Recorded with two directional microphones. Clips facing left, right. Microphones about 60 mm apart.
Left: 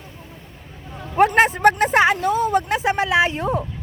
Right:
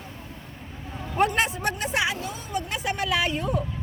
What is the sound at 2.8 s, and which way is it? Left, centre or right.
Speech, left.